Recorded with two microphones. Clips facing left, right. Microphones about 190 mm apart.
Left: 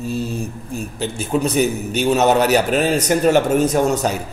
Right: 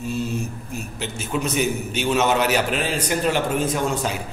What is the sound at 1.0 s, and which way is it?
A man's voice, 35° left (ahead or behind).